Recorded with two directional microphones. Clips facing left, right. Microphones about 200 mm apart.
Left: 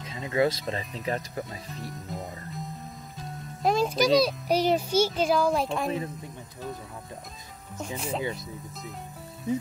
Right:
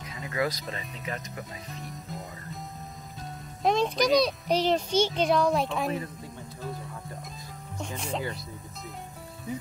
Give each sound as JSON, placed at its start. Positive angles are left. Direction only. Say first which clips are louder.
{"t": 0.1, "sound": "speech", "louder": "left 5 dB", "side_deg": 25}
{"t": 3.6, "sound": "a child's voice", "louder": "left 1 dB", "side_deg": 5}
{"t": 7.8, "sound": "a child's voice", "louder": "left 2 dB", "side_deg": 5}